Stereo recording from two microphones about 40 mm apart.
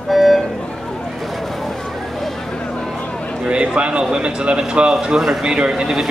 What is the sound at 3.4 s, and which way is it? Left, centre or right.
Speech, right.